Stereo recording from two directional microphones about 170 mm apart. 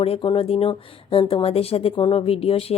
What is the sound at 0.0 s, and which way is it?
Speech, 35° left (ahead or behind).